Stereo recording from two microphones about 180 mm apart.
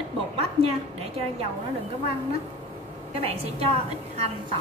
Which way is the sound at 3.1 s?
35° right (ahead or behind).